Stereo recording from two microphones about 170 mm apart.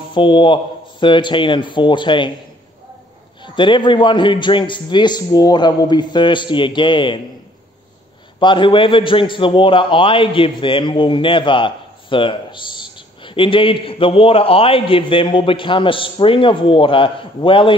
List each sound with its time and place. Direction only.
0.1 s a man's voice: 30° left (ahead or behind)
3.4 s a man's voice: 30° left (ahead or behind)
8.4 s a man's voice: 30° left (ahead or behind)